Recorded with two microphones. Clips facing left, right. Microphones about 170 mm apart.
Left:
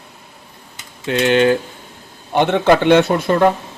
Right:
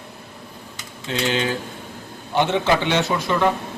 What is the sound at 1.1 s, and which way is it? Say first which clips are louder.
Speech: left 9 dB; 60° left (ahead or behind).